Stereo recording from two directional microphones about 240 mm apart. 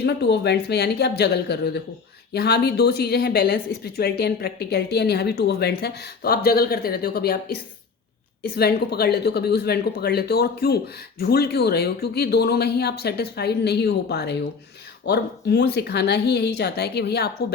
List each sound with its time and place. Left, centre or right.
0.0 s a woman's voice: left